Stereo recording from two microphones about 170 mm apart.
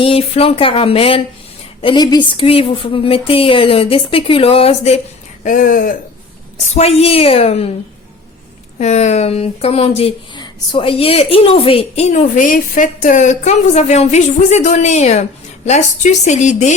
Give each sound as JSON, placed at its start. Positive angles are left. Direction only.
{"t": 0.0, "sound": "speech", "side_deg": 35}
{"t": 5.4, "sound": "speech", "side_deg": 50}
{"t": 6.7, "sound": "speech", "side_deg": 40}
{"t": 8.8, "sound": "speech", "side_deg": 40}